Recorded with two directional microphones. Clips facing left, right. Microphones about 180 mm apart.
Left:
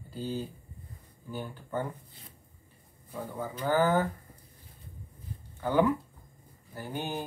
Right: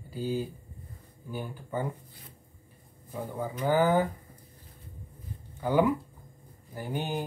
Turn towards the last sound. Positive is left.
turn(degrees=-15)  # may be behind; listen again after turning